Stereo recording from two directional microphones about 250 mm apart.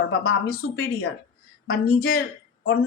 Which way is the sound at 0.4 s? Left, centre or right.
Left.